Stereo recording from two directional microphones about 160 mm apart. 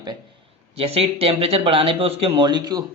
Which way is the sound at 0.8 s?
40° right (ahead or behind).